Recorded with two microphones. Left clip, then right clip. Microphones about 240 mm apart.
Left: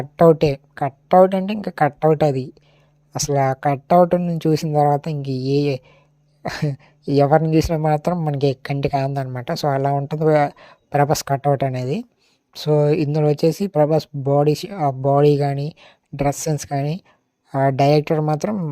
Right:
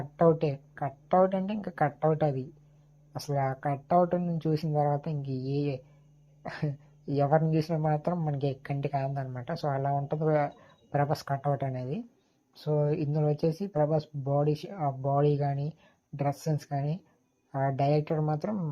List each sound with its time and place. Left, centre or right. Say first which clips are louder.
0.0 s a woman's voice: left 11 dB; left